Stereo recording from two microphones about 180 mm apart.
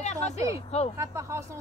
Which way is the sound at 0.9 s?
15° right (ahead or behind).